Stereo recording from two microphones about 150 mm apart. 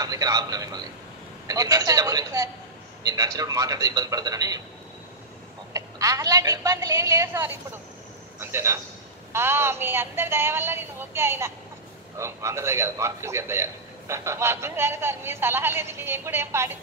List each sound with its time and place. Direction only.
0.0 s a woman's voice: 25° right (ahead or behind)
5.7 s a woman's voice: 20° right (ahead or behind)